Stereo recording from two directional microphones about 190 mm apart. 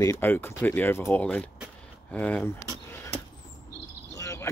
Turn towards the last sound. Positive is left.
turn(degrees=15)  # may be behind; listen again after turning